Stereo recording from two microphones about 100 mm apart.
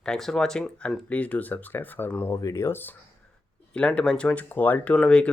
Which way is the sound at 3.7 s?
10° left (ahead or behind).